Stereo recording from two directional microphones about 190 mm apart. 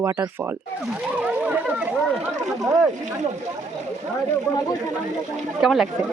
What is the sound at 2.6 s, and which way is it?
Speech, 20° right (ahead or behind).